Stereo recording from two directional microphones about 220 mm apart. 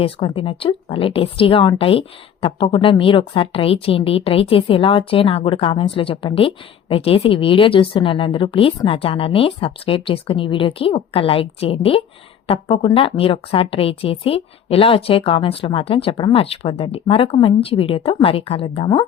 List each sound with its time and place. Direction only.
0.0 s a woman's voice: 25° left (ahead or behind)